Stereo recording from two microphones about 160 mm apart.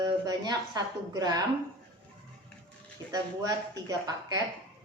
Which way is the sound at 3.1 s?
25° right (ahead or behind).